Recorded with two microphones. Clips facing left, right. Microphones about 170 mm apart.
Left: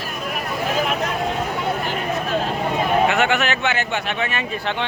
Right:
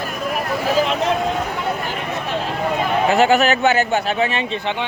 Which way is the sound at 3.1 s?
35° right (ahead or behind).